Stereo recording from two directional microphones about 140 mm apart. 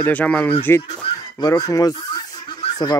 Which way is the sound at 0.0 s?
10° left (ahead or behind).